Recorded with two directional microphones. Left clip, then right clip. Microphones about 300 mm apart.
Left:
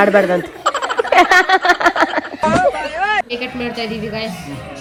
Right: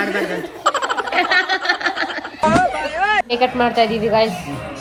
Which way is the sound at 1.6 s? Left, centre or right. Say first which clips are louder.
Left 6 dB; centre.